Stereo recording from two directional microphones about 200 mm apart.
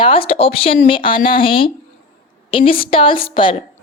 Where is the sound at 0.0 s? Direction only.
25° left (ahead or behind).